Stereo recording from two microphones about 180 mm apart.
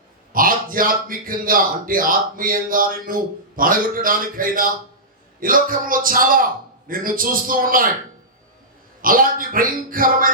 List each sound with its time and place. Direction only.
0.3 s speech: 50° right (ahead or behind)
9.0 s speech: 50° right (ahead or behind)